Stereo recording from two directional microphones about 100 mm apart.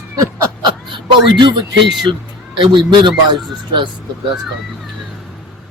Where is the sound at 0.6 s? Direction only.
50° right (ahead or behind).